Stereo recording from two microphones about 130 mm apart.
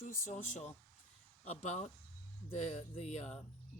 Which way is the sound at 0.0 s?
75° left (ahead or behind).